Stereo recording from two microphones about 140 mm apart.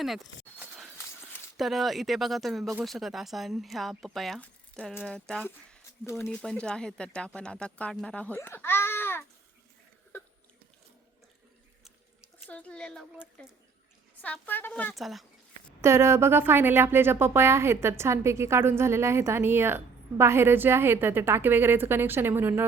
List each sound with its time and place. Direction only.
1.5 s speech: centre (ahead or behind)
8.4 s a sound: 15° left (ahead or behind)
12.5 s speech: 10° left (ahead or behind)
14.4 s speech: 15° left (ahead or behind)
14.9 s speech: centre (ahead or behind)
15.8 s speech: 20° right (ahead or behind)